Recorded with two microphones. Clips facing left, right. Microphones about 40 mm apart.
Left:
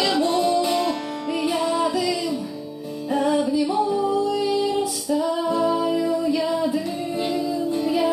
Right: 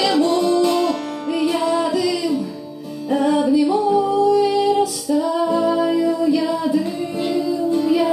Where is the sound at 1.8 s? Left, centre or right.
Centre.